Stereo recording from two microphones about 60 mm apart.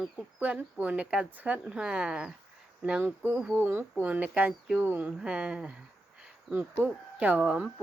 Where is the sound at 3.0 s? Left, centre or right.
Right.